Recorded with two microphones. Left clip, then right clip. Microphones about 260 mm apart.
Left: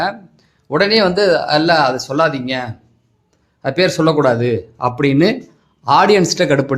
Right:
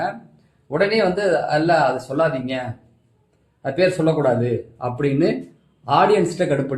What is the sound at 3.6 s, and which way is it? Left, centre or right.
Speech, left.